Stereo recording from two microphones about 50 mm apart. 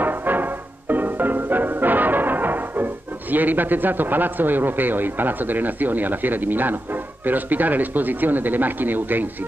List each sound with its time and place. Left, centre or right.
0.0 s music: right
7.2 s speech: right